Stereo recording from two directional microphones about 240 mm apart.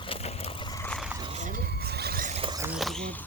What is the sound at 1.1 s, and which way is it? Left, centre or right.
Mechanisms, right.